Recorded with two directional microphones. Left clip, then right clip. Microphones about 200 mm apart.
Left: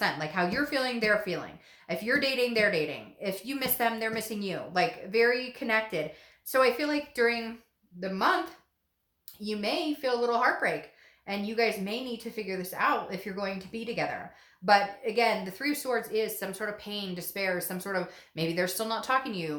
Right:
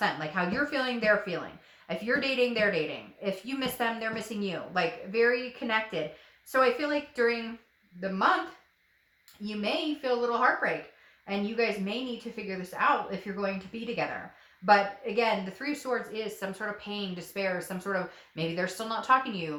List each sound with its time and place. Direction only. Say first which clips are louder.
0.0 s speech: left 1 dB; 40° left (ahead or behind)
9.4 s speech: even; 40° left (ahead or behind)